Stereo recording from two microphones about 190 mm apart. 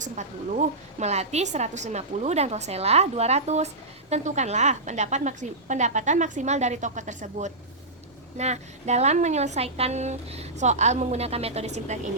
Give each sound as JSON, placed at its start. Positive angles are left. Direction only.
{"t": 0.0, "sound": "a woman's voice", "side_deg": -40}